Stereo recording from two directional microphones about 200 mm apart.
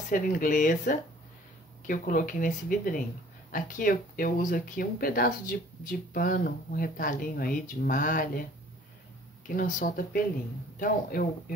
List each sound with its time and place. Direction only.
0.1 s speech: 40° left (ahead or behind)
9.5 s speech: 45° left (ahead or behind)